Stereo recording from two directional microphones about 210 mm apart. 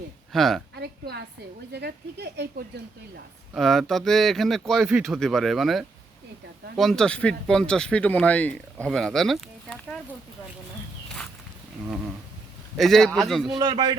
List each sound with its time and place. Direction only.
0.3 s speech: centre (ahead or behind)
0.8 s a sound: 50° right (ahead or behind)
1.7 s speech: 50° right (ahead or behind)
3.5 s speech: centre (ahead or behind)
12.7 s speech: centre (ahead or behind)
13.6 s a man's voice: 20° right (ahead or behind)